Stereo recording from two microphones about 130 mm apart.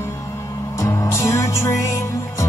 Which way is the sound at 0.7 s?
20° left (ahead or behind).